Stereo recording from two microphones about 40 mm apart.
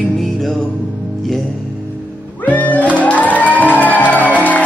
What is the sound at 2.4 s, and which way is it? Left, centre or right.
Music, left.